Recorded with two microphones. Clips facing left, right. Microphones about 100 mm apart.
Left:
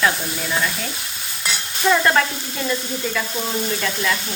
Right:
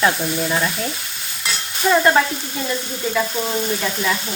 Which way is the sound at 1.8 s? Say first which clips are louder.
Right 2 dB; 10° right (ahead or behind).